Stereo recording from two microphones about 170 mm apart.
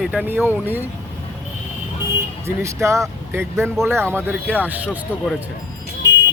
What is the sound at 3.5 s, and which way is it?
Speech, centre (ahead or behind).